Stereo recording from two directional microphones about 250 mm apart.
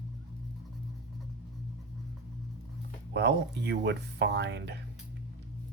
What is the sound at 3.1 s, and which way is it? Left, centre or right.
Speech, right.